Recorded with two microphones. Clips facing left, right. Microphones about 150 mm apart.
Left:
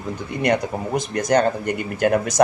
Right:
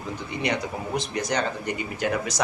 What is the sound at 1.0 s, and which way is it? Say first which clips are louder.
Speech: left 9 dB; 50° left (ahead or behind).